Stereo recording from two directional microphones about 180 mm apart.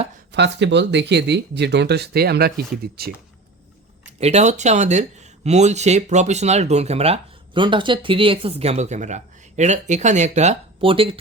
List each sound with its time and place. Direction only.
0.3 s speech: 75° right (ahead or behind)
4.2 s speech: 40° right (ahead or behind)